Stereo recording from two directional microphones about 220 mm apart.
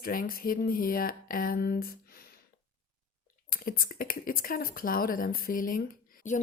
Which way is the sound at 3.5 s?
40° left (ahead or behind).